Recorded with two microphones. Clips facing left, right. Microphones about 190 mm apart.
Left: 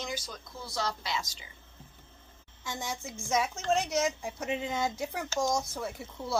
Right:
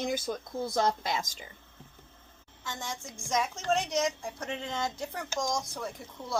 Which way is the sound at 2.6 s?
10° left (ahead or behind).